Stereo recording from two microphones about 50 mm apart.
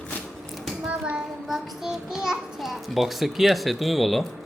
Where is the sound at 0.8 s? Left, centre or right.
Right.